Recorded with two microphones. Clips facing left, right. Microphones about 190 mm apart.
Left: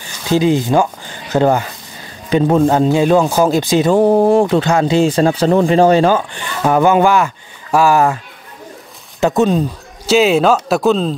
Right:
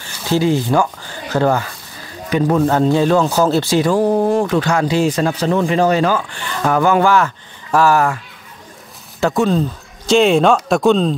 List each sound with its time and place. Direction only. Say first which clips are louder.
0.0 s speech: left 2 dB; 15° left (ahead or behind)
9.2 s a man's voice: left 2 dB; 20° left (ahead or behind); by 11.1 s centre (ahead or behind)